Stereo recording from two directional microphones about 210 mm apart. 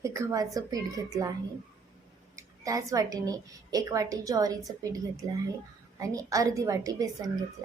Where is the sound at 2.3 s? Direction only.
15° right (ahead or behind).